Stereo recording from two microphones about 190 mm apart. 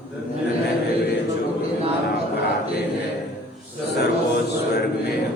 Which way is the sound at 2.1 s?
60° left (ahead or behind).